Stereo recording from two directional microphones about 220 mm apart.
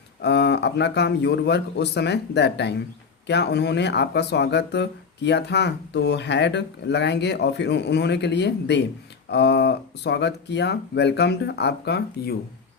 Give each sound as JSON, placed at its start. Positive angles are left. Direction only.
{"t": 0.2, "sound": "speech", "side_deg": 50}